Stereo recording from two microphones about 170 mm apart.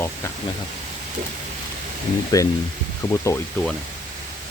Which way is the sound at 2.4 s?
20° left (ahead or behind).